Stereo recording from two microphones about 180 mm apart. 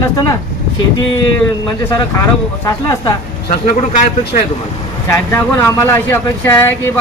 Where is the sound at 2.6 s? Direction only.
20° left (ahead or behind).